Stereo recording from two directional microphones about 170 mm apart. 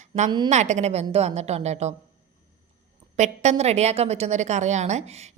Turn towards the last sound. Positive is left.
turn(degrees=-40)  # may be behind; listen again after turning